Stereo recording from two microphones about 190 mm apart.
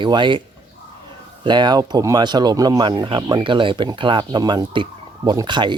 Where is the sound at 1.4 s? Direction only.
25° right (ahead or behind).